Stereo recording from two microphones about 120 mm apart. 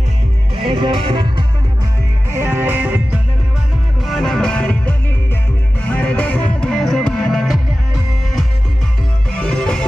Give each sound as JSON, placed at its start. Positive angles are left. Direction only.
{"t": 0.6, "sound": "music", "side_deg": -50}
{"t": 2.3, "sound": "music", "side_deg": -20}
{"t": 4.0, "sound": "music", "side_deg": 0}
{"t": 9.3, "sound": "music", "side_deg": 10}